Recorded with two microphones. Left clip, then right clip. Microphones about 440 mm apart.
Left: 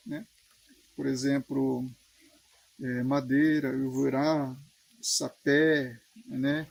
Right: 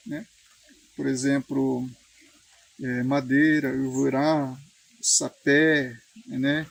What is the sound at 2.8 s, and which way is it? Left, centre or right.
Speech, left.